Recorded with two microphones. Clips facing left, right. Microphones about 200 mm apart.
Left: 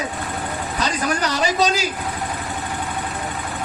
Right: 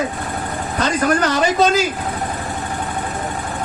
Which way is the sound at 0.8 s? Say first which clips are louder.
Right 6 dB; 50° right (ahead or behind).